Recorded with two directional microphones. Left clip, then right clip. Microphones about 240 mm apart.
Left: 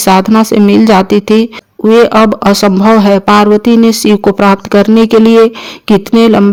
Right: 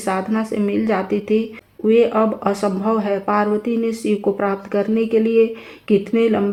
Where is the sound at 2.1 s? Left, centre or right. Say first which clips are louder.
Left 11 dB; left.